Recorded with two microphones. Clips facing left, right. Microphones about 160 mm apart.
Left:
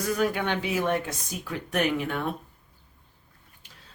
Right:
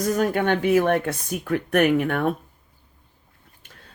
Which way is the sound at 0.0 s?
45° right (ahead or behind).